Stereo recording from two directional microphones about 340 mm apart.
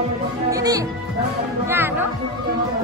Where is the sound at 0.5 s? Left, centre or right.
Centre.